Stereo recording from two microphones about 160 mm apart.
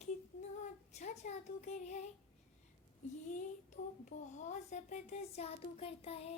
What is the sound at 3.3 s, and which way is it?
A child's voice, 55° left (ahead or behind).